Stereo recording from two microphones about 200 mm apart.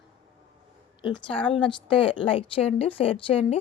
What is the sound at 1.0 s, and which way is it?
A woman's voice, 25° left (ahead or behind).